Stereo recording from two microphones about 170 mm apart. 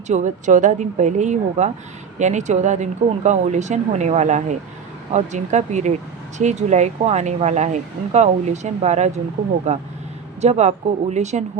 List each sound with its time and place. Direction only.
0.1 s speech: 45° right (ahead or behind)